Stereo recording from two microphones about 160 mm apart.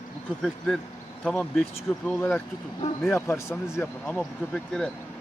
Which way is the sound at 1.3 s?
Centre (ahead or behind).